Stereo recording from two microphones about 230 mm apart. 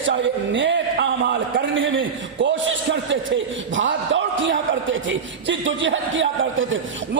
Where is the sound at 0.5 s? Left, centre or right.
Right.